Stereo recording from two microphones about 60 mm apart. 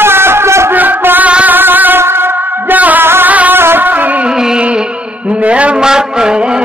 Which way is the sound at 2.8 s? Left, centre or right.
Right.